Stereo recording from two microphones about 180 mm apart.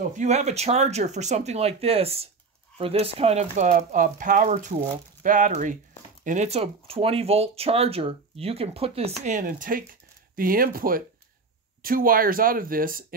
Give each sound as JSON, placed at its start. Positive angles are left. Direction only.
{"t": 0.2, "sound": "speech", "side_deg": -40}